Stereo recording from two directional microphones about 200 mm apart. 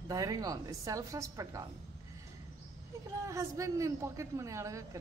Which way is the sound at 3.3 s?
15° right (ahead or behind).